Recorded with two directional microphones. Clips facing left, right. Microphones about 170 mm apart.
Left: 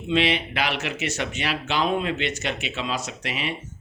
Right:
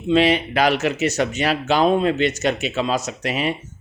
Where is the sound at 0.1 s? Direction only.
40° right (ahead or behind).